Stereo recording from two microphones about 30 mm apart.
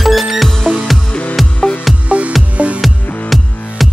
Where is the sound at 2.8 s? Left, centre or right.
Centre.